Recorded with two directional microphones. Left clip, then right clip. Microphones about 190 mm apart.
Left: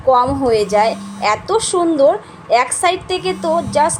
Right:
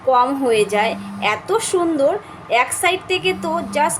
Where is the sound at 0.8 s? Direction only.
15° right (ahead or behind).